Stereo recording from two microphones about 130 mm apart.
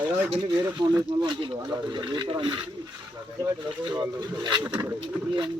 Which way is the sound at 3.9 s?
35° right (ahead or behind).